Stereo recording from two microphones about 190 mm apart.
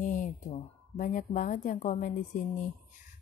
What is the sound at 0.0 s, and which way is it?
A woman's voice, 40° left (ahead or behind).